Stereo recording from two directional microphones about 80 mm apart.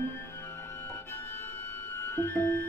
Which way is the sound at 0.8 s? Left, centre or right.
Left.